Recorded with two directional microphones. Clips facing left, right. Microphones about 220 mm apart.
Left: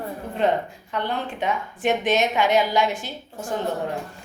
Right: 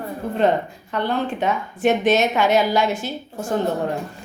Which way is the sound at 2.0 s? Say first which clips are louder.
Right 3 dB; 15° left (ahead or behind).